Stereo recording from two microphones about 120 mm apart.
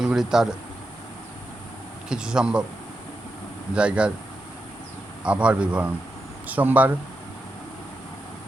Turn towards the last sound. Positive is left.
turn(degrees=-15)  # may be behind; listen again after turning